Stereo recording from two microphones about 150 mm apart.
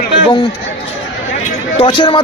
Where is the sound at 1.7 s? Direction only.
35° left (ahead or behind).